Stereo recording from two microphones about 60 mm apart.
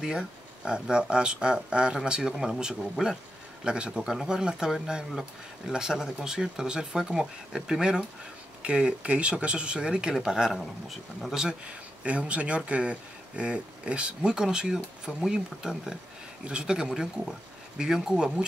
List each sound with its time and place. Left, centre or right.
0.7 s speech: centre
10.6 s speech: centre
12.0 s speech: centre